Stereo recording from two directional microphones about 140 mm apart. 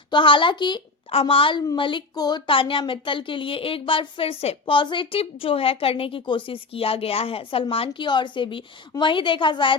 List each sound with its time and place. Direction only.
0.1 s speech: 35° left (ahead or behind)